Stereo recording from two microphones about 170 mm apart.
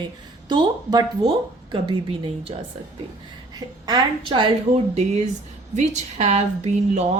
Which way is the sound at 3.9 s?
25° right (ahead or behind).